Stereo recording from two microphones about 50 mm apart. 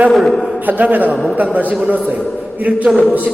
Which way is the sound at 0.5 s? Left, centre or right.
Right.